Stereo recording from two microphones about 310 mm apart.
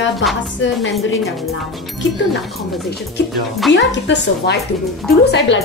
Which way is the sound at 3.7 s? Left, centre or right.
Left.